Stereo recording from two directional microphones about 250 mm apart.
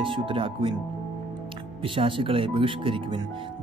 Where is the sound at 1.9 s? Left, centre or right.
Right.